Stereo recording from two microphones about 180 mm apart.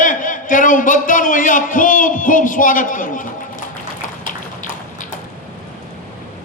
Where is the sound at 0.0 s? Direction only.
45° left (ahead or behind).